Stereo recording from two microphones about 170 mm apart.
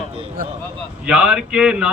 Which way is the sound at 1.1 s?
5° right (ahead or behind).